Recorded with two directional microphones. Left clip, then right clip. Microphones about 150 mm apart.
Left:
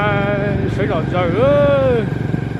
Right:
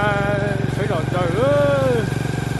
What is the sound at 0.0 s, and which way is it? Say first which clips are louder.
Vehicle: left 2 dB; 10° left (ahead or behind).